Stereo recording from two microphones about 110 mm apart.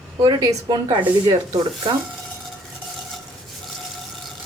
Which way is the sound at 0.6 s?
45° right (ahead or behind).